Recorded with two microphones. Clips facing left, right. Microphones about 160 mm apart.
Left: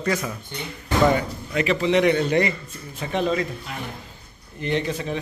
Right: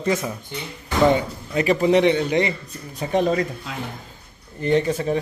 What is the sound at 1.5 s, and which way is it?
Speech, 40° right (ahead or behind).